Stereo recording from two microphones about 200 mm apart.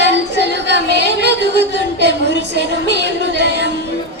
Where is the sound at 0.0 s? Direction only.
60° right (ahead or behind).